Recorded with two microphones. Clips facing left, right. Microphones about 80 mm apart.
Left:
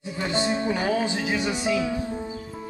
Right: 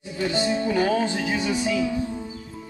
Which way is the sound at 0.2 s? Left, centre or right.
Left.